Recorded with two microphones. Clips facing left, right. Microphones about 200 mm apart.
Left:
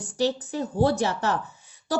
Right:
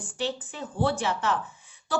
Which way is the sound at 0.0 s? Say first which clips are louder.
Left 6 dB; 40° left (ahead or behind).